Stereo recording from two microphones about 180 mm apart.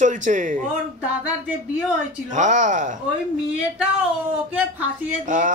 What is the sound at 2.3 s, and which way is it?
Speech, 40° right (ahead or behind).